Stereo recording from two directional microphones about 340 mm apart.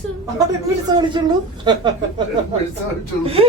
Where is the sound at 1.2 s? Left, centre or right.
Centre.